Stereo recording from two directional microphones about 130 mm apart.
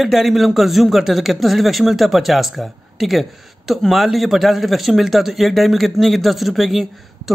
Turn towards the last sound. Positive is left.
turn(degrees=0)  # may be behind; listen again after turning